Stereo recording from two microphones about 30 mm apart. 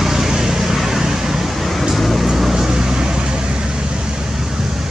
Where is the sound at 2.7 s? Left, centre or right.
Right.